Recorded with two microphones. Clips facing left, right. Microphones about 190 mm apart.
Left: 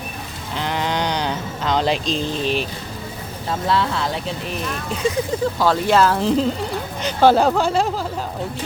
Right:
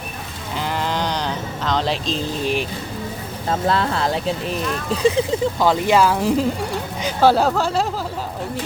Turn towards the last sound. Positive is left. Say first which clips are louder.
# left 2 dB
turn(degrees=0)  # may be behind; listen again after turning